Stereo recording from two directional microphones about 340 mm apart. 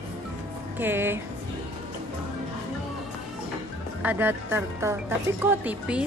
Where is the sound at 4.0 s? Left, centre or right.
Centre.